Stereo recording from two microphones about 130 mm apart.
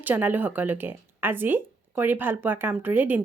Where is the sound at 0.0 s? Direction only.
15° right (ahead or behind).